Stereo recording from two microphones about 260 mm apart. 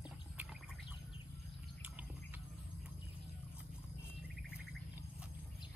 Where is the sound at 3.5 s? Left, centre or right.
Centre.